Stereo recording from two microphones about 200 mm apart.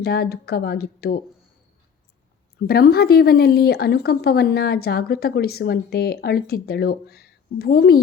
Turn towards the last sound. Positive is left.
turn(degrees=50)  # may be behind; listen again after turning